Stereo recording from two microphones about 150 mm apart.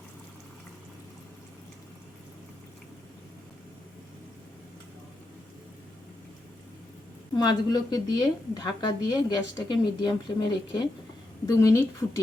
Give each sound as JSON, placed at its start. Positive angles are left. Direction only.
{"t": 7.3, "sound": "a woman's voice", "side_deg": 25}